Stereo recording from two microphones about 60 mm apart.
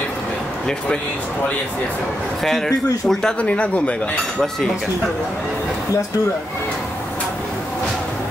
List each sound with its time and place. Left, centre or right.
2.4 s speech: centre
3.3 s speech: left